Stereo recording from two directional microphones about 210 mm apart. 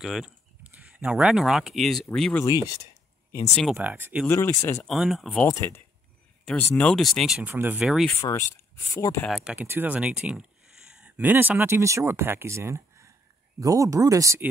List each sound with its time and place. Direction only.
0.0 s speech: centre (ahead or behind)
2.4 s speech: 15° left (ahead or behind)
3.5 s speech: 5° right (ahead or behind)
4.3 s speech: 10° left (ahead or behind)
4.8 s speech: centre (ahead or behind)
5.5 s speech: 15° left (ahead or behind)
8.2 s speech: 15° left (ahead or behind)
9.2 s speech: centre (ahead or behind)